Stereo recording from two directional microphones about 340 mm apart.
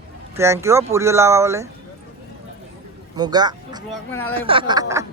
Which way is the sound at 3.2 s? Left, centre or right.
Centre.